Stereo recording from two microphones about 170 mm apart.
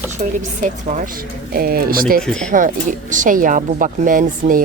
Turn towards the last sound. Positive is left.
turn(degrees=-55)  # may be behind; listen again after turning